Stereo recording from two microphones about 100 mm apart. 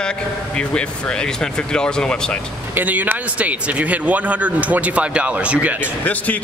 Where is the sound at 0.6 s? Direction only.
10° left (ahead or behind).